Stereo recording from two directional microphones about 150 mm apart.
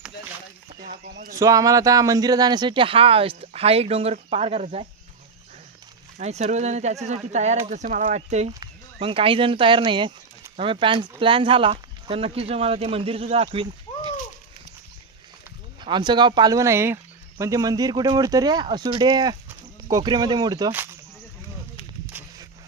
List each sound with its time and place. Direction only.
0.8 s speech: 75° right (ahead or behind)
1.4 s speech: 25° right (ahead or behind); by 4.9 s 45° right (ahead or behind)
6.1 s speech: 50° right (ahead or behind)
8.6 s speech: 35° right (ahead or behind)
15.8 s speech: 30° right (ahead or behind)
22.1 s a sound: 10° right (ahead or behind)